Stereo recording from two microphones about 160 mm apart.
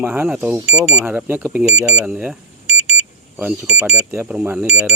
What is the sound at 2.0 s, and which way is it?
Speech, 5° right (ahead or behind).